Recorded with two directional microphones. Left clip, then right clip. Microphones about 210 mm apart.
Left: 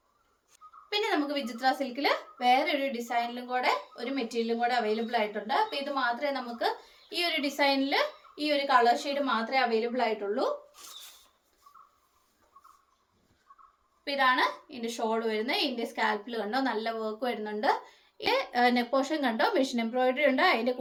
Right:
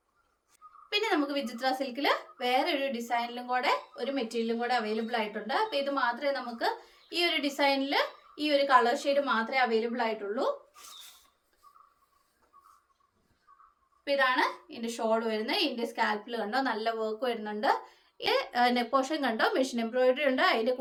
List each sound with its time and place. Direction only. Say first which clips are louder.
0.9 s a woman's voice: even; 15° right (ahead or behind)
10.8 s a sound: left 1 dB; 15° left (ahead or behind)
14.0 s a woman's voice: left 1 dB; 15° right (ahead or behind)